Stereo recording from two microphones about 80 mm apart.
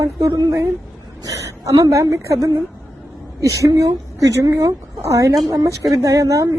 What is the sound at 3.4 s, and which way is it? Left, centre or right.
A woman's voice, right.